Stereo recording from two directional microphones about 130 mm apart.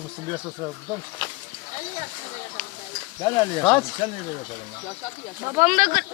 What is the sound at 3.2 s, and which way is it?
Speech, 35° left (ahead or behind).